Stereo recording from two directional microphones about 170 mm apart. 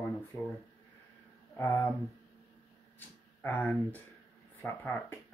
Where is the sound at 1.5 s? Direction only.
15° left (ahead or behind).